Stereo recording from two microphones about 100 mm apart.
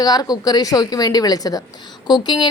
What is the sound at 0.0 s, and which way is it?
A woman's voice, 40° left (ahead or behind).